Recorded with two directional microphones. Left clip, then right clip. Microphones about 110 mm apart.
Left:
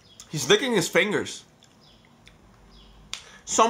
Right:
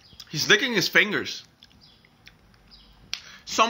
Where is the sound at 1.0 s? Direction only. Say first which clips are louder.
Right 4 dB; 30° left (ahead or behind).